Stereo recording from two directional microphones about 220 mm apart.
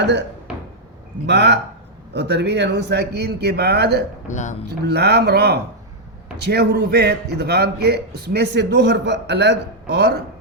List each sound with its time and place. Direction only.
0.0 s speech: 55° right (ahead or behind)
1.3 s a man's voice: 50° right (ahead or behind)
4.3 s speech: 35° left (ahead or behind)
4.6 s a man's voice: 50° right (ahead or behind)